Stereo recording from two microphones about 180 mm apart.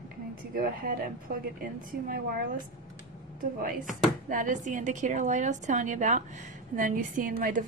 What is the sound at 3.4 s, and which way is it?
Speech, 50° right (ahead or behind).